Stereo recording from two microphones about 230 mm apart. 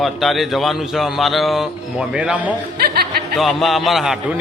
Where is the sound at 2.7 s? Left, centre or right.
Right.